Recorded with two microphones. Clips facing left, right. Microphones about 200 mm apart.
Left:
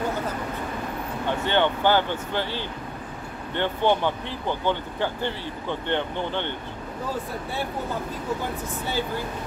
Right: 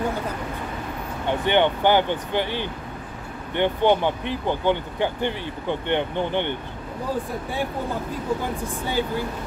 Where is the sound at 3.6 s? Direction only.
15° right (ahead or behind).